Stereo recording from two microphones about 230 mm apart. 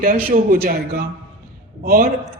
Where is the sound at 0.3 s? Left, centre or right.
Right.